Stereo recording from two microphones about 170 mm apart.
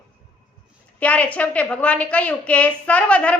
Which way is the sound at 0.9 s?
10° left (ahead or behind).